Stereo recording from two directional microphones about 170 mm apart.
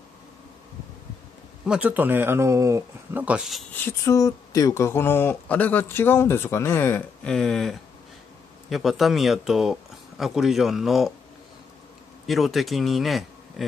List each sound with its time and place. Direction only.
1.7 s speech: 10° right (ahead or behind)
3.7 s speech: 15° left (ahead or behind)
12.3 s speech: centre (ahead or behind)